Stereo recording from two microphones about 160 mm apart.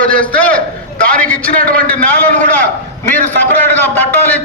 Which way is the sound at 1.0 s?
10° left (ahead or behind).